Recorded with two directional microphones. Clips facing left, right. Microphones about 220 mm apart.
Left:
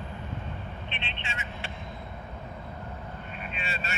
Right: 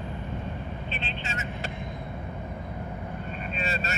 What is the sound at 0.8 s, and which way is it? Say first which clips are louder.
Vehicle: right 4 dB; 40° right (ahead or behind).